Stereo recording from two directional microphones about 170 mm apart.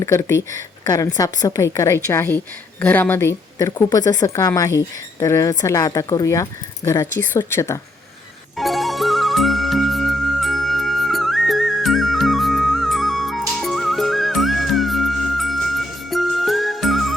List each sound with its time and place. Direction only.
0.0 s speech: 15° left (ahead or behind)
8.5 s music: centre (ahead or behind)